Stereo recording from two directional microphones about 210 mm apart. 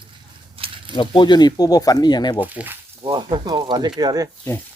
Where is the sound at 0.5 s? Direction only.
25° right (ahead or behind).